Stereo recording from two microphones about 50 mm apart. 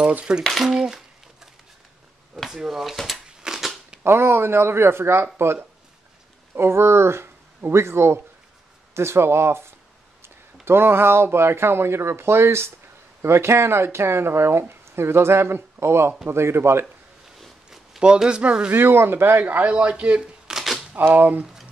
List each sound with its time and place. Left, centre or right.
0.4 s dishes: centre
2.3 s speech: centre
3.3 s a sound: centre
4.0 s speech: right
17.6 s a sound: centre
18.1 s speech: centre
18.7 s speech: right
19.7 s speech: right
20.4 s shuffling cards: centre
20.9 s speech: right